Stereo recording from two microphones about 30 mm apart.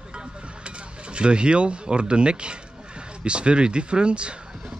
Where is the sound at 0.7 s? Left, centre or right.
Right.